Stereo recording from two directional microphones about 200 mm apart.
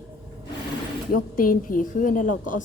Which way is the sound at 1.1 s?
45° left (ahead or behind).